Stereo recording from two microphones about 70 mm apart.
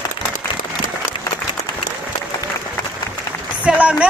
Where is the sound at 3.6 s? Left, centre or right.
Centre.